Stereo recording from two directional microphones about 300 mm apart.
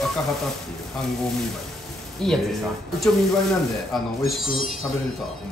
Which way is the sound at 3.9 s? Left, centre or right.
Centre.